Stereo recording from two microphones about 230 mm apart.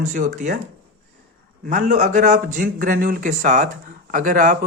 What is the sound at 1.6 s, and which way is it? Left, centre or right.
A man's voice, right.